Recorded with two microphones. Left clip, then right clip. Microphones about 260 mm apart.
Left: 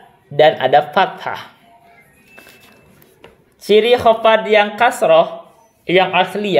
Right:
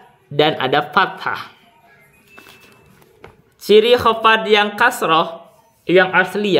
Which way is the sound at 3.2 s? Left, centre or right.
Centre.